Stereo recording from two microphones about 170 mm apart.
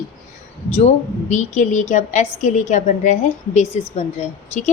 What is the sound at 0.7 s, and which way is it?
A woman's voice, 40° left (ahead or behind).